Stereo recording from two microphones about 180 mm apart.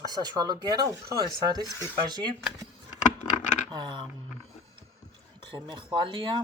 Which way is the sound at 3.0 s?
45° left (ahead or behind).